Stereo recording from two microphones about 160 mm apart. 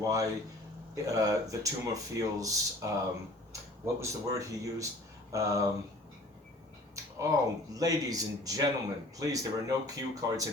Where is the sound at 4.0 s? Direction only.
20° right (ahead or behind).